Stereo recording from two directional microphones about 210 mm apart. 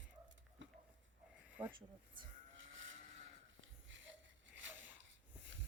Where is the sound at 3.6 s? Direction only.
60° right (ahead or behind).